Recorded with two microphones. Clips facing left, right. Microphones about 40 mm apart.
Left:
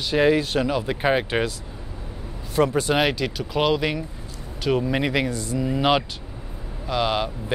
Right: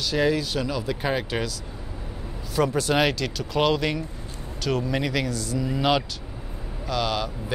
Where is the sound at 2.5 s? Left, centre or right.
Left.